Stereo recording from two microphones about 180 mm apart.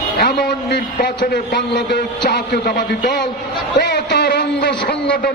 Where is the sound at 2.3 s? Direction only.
60° left (ahead or behind).